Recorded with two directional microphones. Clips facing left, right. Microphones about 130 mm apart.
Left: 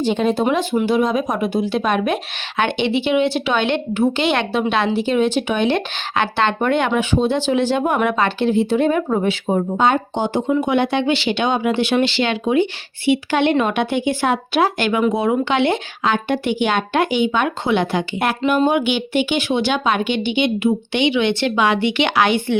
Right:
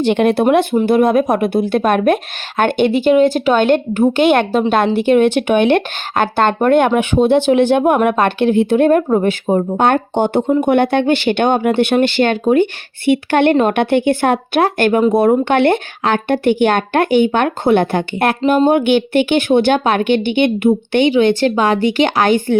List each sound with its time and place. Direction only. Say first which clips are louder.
0.0 s speech: right 5 dB; 65° right (ahead or behind)
0.5 s speech: right 5 dB; 55° right (ahead or behind)